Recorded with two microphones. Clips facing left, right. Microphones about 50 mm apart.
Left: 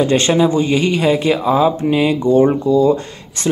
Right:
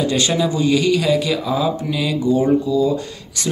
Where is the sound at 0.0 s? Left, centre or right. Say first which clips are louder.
Left 5 dB; left.